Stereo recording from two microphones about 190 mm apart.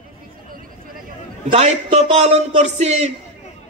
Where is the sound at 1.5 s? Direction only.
35° right (ahead or behind).